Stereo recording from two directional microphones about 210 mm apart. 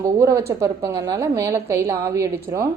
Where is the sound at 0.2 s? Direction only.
15° right (ahead or behind).